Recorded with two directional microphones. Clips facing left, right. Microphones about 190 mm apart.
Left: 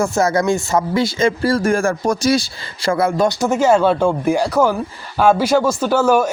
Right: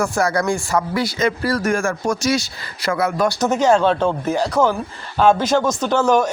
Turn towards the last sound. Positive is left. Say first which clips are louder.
# left 2 dB
turn(degrees=5)  # may be behind; listen again after turning